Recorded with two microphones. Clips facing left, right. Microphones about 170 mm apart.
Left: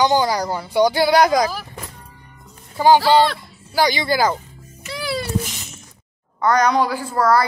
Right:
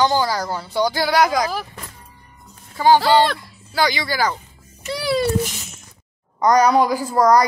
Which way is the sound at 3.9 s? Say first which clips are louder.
Left 3 dB; 25° left (ahead or behind).